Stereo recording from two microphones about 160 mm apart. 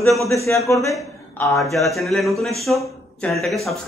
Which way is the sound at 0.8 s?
20° left (ahead or behind).